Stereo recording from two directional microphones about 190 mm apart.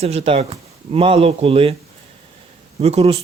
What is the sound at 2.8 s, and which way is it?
Speech, 30° right (ahead or behind).